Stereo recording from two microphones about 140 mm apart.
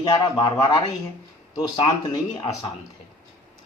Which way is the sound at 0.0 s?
30° left (ahead or behind).